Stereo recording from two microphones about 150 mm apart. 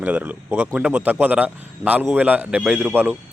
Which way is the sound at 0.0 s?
10° right (ahead or behind).